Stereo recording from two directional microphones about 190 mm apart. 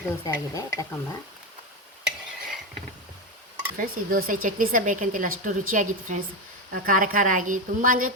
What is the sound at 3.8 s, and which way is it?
A woman's voice, 50° right (ahead or behind).